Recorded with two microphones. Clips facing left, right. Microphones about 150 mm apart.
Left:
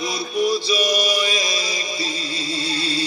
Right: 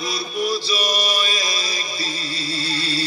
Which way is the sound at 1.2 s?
20° left (ahead or behind).